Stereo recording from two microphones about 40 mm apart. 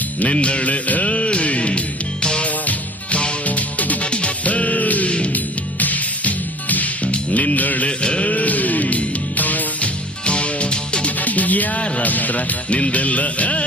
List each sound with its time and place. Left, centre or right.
0.2 s music: left
7.9 s a sound: left
8.3 s music: left
10.2 s music: left
11.2 s music: left